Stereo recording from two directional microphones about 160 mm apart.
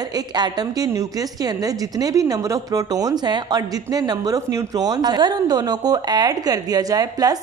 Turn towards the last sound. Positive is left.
turn(degrees=-25)  # may be behind; listen again after turning